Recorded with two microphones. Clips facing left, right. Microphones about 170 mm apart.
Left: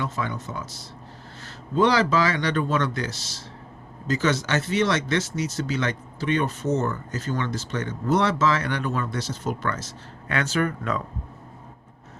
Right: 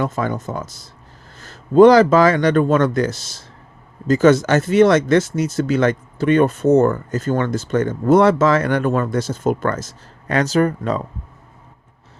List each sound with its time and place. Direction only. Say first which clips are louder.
0.0 s speech: right 8 dB; 45° right (ahead or behind)